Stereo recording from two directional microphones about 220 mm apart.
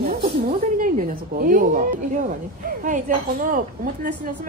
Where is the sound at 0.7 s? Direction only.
40° right (ahead or behind).